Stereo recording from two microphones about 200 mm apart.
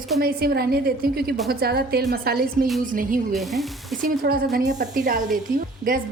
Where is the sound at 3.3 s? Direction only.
Centre (ahead or behind).